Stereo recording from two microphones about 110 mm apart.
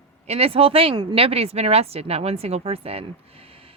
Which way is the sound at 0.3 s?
60° right (ahead or behind).